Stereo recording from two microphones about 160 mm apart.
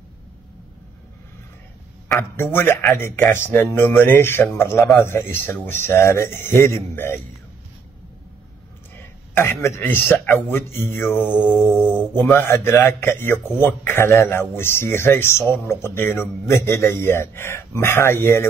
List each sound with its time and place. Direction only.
2.3 s a man's voice: 15° left (ahead or behind)
9.3 s a man's voice: 15° left (ahead or behind)
11.2 s mantra: 5° right (ahead or behind)
12.2 s a man's voice: 15° left (ahead or behind)